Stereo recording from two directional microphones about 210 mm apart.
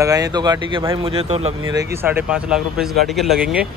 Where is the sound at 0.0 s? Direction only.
15° right (ahead or behind).